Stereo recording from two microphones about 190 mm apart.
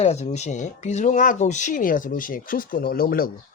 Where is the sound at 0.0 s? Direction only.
35° left (ahead or behind); by 3.3 s 50° left (ahead or behind).